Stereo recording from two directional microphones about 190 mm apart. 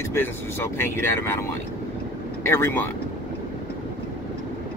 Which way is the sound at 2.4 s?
15° left (ahead or behind).